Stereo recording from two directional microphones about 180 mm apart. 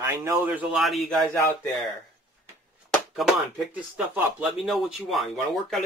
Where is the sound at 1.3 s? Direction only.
15° left (ahead or behind).